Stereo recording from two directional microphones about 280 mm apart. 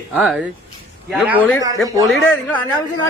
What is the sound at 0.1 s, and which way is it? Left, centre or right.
Speech, centre.